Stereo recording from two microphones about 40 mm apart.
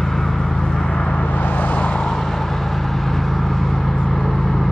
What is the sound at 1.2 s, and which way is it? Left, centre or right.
Vehicle, left.